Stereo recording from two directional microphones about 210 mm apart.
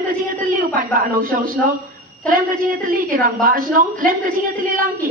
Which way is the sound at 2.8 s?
40° right (ahead or behind).